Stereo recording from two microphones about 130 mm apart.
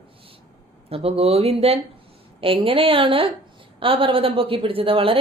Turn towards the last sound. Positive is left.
turn(degrees=-45)  # may be behind; listen again after turning